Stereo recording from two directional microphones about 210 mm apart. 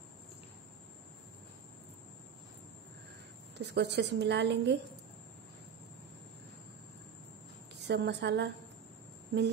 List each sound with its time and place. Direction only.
3.5 s a woman's voice: 55° right (ahead or behind)
7.8 s a woman's voice: 55° right (ahead or behind)